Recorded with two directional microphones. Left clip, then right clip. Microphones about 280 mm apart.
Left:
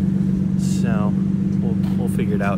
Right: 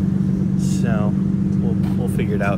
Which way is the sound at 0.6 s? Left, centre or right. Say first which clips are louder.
Right 1 dB; centre.